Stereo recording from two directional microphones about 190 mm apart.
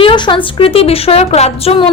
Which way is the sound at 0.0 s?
25° left (ahead or behind).